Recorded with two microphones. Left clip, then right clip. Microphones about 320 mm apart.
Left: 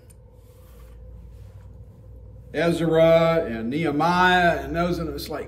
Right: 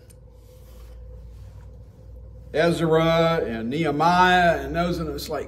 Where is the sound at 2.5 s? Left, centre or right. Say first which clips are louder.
Right 1 dB; centre.